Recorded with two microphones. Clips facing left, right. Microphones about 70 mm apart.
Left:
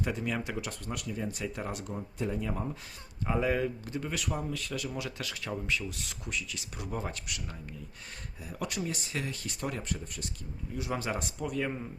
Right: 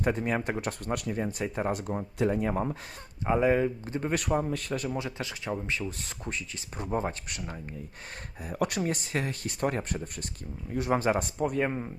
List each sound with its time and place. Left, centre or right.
0.0 s speech: right
2.1 s speech: right
3.4 s speech: right
4.1 s speech: right
4.9 s speech: right
8.4 s speech: right